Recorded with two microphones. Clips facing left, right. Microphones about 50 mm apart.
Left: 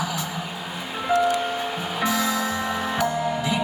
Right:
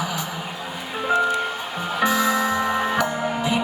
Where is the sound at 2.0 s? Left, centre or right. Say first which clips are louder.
Right 4 dB; right.